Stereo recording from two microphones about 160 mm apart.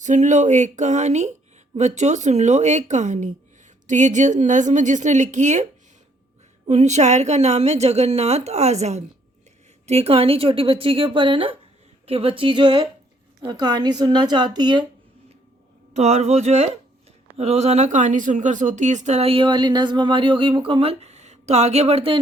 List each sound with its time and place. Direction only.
0.0 s a woman's voice: 50° right (ahead or behind)
6.7 s a woman's voice: 45° right (ahead or behind); by 14.8 s 25° right (ahead or behind)
15.9 s a woman's voice: 45° right (ahead or behind)